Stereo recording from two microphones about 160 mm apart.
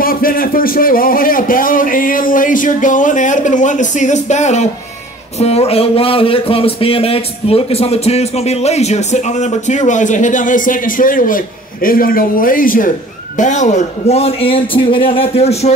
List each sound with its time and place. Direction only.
0.0 s a man's voice: 65° left (ahead or behind); by 15.7 s 40° left (ahead or behind)